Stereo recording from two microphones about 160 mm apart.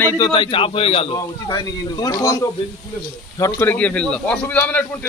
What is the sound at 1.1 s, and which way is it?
A man's voice, 25° left (ahead or behind).